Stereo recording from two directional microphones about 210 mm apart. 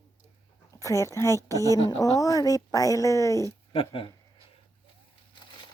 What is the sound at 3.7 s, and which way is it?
Speech, 25° left (ahead or behind).